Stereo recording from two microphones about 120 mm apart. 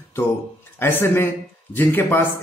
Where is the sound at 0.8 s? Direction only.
20° left (ahead or behind).